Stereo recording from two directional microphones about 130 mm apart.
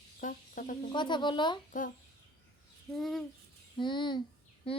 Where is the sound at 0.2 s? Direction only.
90° left.